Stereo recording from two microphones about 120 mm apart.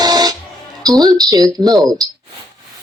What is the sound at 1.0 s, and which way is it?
Speech, 30° right (ahead or behind).